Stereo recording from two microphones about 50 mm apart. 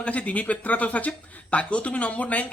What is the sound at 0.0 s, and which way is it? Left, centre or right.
Speech, left.